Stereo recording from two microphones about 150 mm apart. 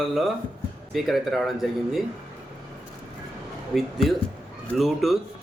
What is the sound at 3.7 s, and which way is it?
Speech, centre (ahead or behind).